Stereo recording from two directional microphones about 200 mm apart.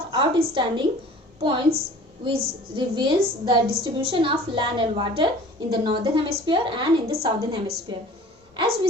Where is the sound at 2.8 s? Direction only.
25° right (ahead or behind).